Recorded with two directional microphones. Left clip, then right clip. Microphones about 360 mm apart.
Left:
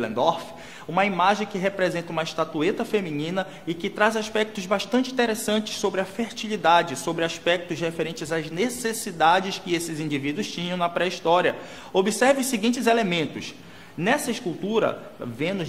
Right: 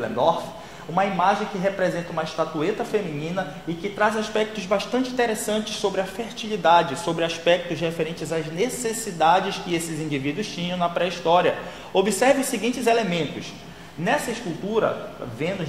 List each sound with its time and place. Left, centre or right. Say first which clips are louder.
0.2 s a man's voice: right 2 dB; left
6.5 s a man's voice: right 2 dB; left
14.8 s a man's voice: right 1 dB; left